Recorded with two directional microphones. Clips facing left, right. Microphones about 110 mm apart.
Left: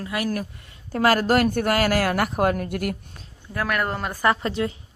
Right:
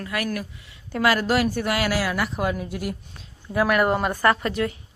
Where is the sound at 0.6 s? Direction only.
45° left (ahead or behind).